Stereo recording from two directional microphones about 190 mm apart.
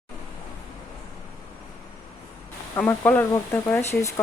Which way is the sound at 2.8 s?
10° left (ahead or behind).